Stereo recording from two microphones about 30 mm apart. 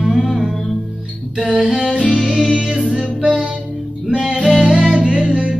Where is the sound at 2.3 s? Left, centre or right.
Right.